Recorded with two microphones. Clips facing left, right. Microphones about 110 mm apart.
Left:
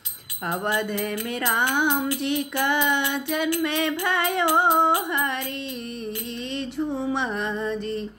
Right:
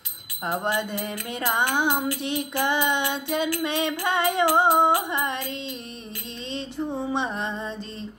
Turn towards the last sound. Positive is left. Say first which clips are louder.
# left 3 dB
turn(degrees=-25)  # may be behind; listen again after turning